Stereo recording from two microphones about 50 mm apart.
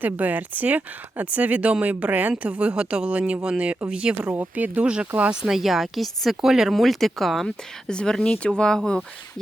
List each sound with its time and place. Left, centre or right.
0.0 s speech: right
4.3 s speech: right
5.4 s speech: centre
6.7 s speech: centre
7.4 s speech: centre